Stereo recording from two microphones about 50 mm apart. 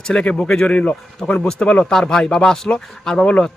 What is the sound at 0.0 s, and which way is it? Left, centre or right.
A man's voice, centre.